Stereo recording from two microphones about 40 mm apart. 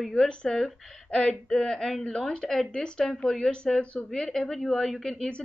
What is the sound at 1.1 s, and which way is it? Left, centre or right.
Speech, left.